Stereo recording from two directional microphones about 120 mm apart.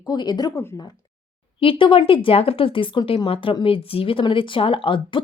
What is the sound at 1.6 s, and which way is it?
Speech, 45° left (ahead or behind).